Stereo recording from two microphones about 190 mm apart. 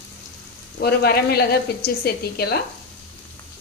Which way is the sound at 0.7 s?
55° left (ahead or behind).